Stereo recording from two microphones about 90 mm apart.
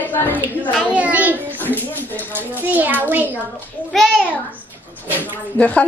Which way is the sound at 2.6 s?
20° right (ahead or behind).